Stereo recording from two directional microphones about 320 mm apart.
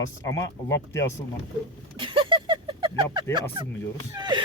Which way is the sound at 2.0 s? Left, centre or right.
Centre.